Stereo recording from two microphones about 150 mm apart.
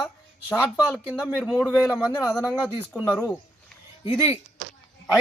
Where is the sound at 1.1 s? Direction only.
5° right (ahead or behind).